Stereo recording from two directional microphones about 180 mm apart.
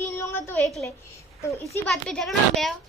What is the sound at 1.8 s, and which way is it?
Speech, centre (ahead or behind).